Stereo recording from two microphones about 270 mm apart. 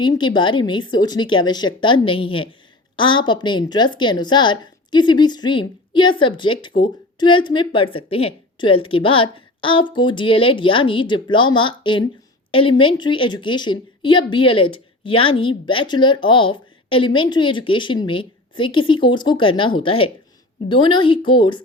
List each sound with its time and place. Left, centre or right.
0.0 s a woman's voice: centre